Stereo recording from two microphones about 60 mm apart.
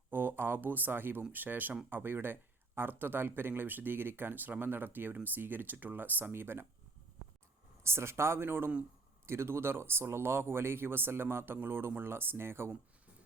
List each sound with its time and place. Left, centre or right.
0.1 s speech: right
7.9 s speech: right